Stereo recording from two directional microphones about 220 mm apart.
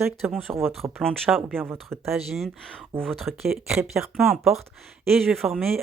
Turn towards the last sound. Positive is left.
turn(degrees=0)  # may be behind; listen again after turning